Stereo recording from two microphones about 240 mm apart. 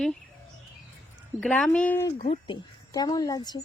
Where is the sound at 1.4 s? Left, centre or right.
Centre.